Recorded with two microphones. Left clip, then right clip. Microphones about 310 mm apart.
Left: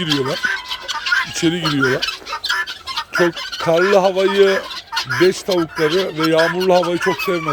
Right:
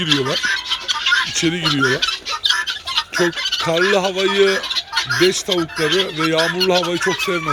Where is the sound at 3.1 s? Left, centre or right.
Centre.